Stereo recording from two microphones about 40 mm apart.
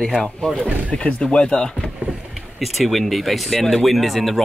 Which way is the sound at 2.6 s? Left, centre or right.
Centre.